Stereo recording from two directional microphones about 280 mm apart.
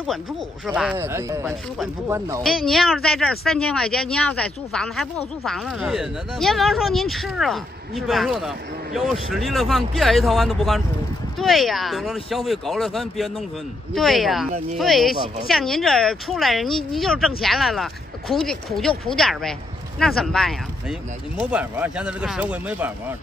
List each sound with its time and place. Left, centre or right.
0.7 s speech: centre
2.4 s speech: centre